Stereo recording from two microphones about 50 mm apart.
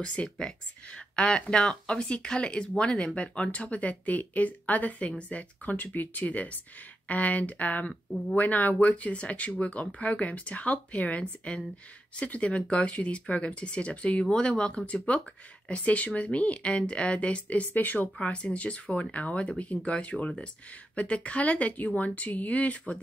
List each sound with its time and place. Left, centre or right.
0.0 s speech: left
18.2 s speech: left